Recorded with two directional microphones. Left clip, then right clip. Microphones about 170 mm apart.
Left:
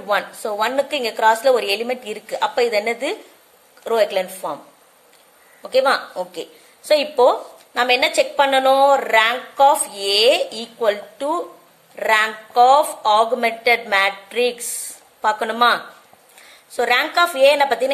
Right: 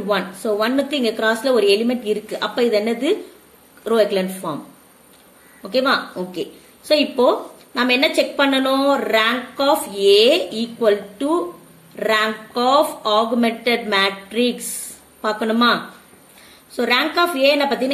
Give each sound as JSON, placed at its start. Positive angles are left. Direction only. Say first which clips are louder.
{"t": 0.1, "sound": "a woman's voice", "louder": "even", "side_deg": 35}
{"t": 5.6, "sound": "a woman's voice", "louder": "left 1 dB", "side_deg": 40}